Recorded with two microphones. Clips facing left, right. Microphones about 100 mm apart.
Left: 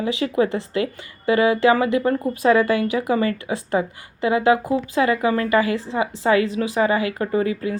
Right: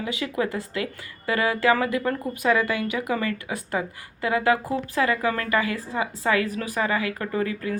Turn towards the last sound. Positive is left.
turn(degrees=20)  # may be behind; listen again after turning